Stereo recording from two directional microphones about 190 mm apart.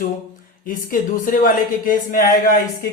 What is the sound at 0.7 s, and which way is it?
Speech, 45° left (ahead or behind).